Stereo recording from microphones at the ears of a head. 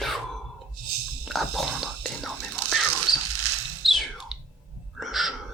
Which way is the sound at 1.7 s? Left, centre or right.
Right.